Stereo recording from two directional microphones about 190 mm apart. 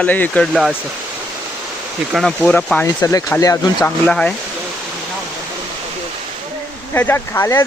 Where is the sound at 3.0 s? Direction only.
15° left (ahead or behind).